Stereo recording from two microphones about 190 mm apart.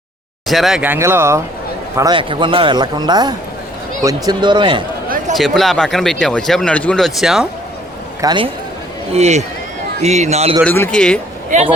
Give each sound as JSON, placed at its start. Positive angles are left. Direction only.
{"t": 0.4, "sound": "speech", "side_deg": 0}
{"t": 5.4, "sound": "speech", "side_deg": 0}
{"t": 8.2, "sound": "speech", "side_deg": -25}
{"t": 9.1, "sound": "a man's voice", "side_deg": -35}
{"t": 10.6, "sound": "speech", "side_deg": 5}